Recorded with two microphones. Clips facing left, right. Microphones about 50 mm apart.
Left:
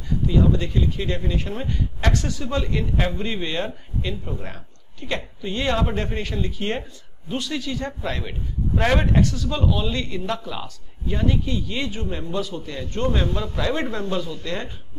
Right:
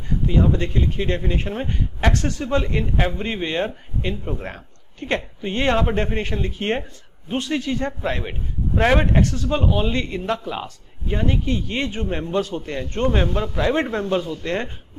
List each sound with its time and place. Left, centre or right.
0.3 s speech: right
2.1 s a man's voice: right